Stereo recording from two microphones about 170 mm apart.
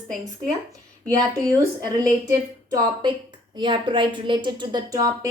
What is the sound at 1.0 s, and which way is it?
A woman's voice, 20° right (ahead or behind).